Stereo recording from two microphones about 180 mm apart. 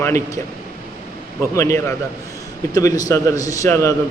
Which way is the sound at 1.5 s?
15° left (ahead or behind).